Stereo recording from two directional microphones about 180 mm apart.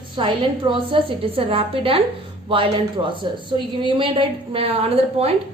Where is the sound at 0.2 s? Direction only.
30° right (ahead or behind).